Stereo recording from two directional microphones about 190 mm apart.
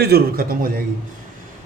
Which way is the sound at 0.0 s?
55° right (ahead or behind).